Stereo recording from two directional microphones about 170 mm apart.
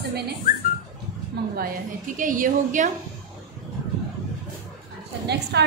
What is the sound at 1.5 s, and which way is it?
A woman's voice, 55° right (ahead or behind).